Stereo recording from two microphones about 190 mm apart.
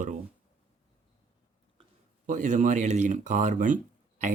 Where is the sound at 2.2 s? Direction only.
40° right (ahead or behind).